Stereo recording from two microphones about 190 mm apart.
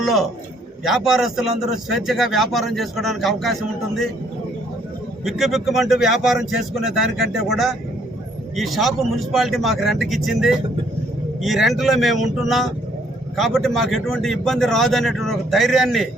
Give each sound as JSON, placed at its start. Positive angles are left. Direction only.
{"t": 0.0, "sound": "a sound", "side_deg": 0}
{"t": 0.9, "sound": "a man's voice", "side_deg": 0}
{"t": 5.2, "sound": "a man's voice", "side_deg": 0}